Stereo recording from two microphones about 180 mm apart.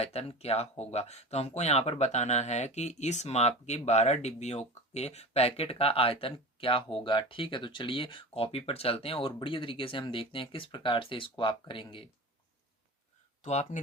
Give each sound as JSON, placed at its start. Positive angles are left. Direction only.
{"t": 0.0, "sound": "speech", "side_deg": 35}
{"t": 13.4, "sound": "speech", "side_deg": 40}